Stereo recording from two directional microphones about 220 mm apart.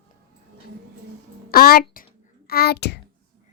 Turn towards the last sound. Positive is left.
turn(degrees=50)  # may be behind; listen again after turning